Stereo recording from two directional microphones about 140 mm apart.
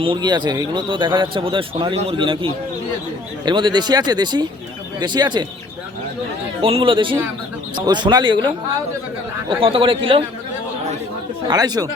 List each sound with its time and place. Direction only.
0.0 s a man's voice: 35° right (ahead or behind)
6.6 s a man's voice: 40° right (ahead or behind)
9.5 s a man's voice: 40° right (ahead or behind)
11.4 s speech: 30° right (ahead or behind)